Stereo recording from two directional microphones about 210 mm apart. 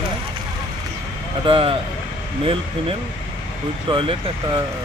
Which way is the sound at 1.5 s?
25° right (ahead or behind).